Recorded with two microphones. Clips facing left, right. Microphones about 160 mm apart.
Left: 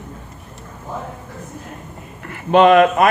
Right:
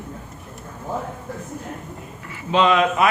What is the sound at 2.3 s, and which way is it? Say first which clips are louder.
Speech: left 7 dB; 55° left (ahead or behind).